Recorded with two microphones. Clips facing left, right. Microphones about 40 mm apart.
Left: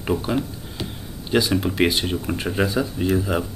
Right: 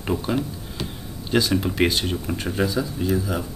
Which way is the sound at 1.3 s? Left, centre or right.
Centre.